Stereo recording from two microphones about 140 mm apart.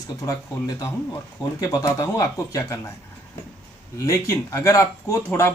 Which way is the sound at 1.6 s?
25° left (ahead or behind).